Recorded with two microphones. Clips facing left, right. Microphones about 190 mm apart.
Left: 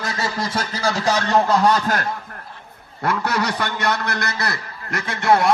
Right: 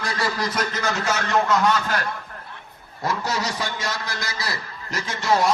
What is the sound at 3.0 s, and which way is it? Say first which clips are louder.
A man's voice: left 4 dB; 60° left (ahead or behind).